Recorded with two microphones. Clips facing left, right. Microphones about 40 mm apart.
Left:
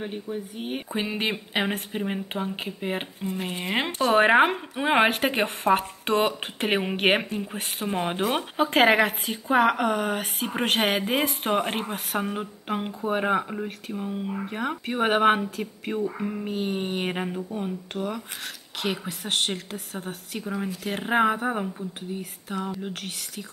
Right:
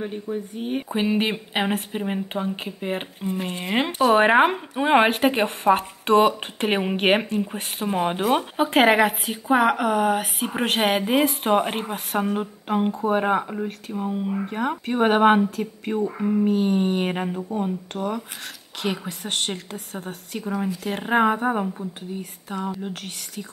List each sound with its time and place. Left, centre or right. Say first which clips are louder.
0.6 s speech: right 5 dB; centre
0.8 s a woman's voice: right 5 dB; centre